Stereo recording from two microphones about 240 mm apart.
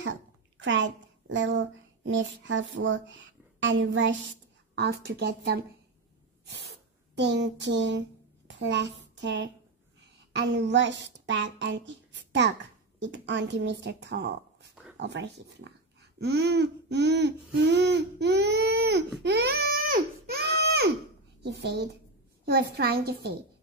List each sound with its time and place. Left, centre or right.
0.0 s a woman's voice: right
6.4 s spray: right
7.2 s a woman's voice: right
19.2 s a sound: right
21.4 s a woman's voice: right